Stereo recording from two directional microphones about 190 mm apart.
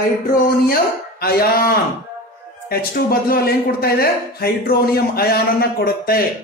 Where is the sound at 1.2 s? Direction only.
50° left (ahead or behind).